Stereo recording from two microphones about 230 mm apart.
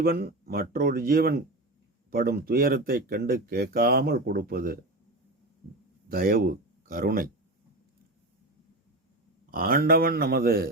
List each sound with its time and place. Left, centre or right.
0.0 s speech: right
6.1 s speech: right
9.5 s speech: right